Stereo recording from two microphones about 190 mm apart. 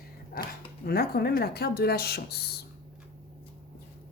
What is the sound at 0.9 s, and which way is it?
A woman's voice, 55° left (ahead or behind).